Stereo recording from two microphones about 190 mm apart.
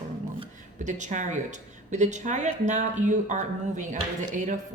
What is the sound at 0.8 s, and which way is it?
Speech, 40° right (ahead or behind).